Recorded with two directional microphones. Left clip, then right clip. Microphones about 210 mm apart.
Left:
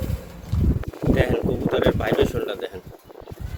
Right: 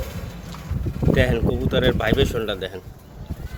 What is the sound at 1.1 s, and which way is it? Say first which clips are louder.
Speech: right 2 dB; centre (ahead or behind).